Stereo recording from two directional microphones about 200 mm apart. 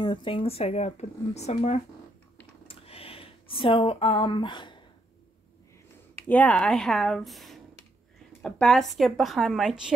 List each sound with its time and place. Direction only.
0.0 s speech: 25° left (ahead or behind)
2.7 s a sound: 30° left (ahead or behind)
6.2 s a woman's voice: 10° left (ahead or behind)